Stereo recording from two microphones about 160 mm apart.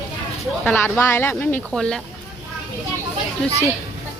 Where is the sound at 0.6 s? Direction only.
10° left (ahead or behind).